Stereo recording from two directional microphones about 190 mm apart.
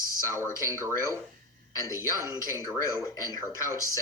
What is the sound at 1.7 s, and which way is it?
Speech, 15° left (ahead or behind).